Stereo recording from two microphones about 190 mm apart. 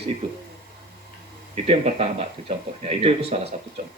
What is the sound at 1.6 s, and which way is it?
Speech, 30° right (ahead or behind).